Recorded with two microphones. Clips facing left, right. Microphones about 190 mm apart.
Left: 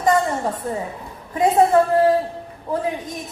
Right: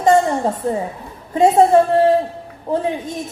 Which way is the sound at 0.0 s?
25° right (ahead or behind).